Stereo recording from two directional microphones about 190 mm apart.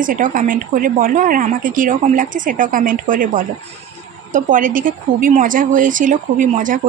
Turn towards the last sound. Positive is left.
turn(degrees=-45)  # may be behind; listen again after turning